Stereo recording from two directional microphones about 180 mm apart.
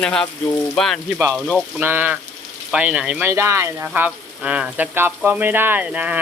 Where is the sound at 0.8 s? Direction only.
5° left (ahead or behind).